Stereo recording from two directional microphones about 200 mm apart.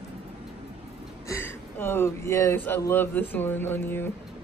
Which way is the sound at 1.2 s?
10° left (ahead or behind).